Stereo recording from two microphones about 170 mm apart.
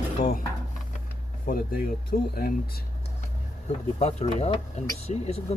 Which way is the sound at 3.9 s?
35° left (ahead or behind).